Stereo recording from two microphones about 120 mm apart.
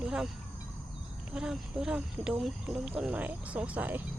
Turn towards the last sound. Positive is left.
turn(degrees=-15)  # may be behind; listen again after turning